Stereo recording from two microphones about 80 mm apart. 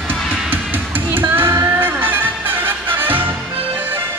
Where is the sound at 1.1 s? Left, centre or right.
Right.